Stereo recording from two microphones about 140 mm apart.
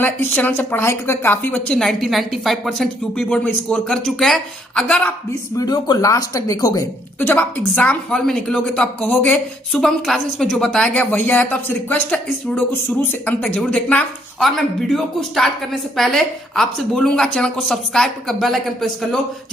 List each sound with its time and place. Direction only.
0.0 s a woman's voice: 15° left (ahead or behind)
5.5 s speech: 30° left (ahead or behind)
7.2 s a woman's voice: 10° left (ahead or behind)